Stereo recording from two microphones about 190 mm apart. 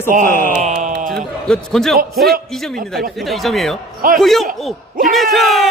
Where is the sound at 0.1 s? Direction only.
45° right (ahead or behind).